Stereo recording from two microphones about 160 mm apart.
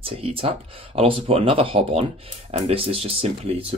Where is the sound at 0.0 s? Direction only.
35° right (ahead or behind).